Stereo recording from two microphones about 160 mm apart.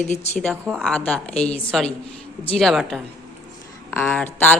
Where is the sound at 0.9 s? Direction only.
5° left (ahead or behind).